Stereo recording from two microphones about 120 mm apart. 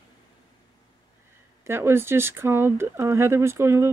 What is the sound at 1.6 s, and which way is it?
Speech, 20° right (ahead or behind).